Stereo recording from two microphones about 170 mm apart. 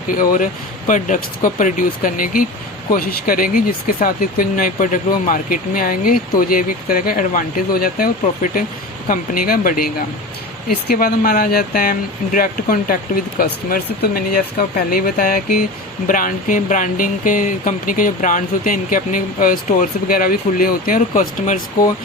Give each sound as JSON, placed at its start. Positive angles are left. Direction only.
{"t": 0.1, "sound": "speech", "side_deg": 55}